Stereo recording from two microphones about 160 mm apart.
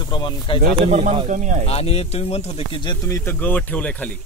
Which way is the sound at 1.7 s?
40° left (ahead or behind).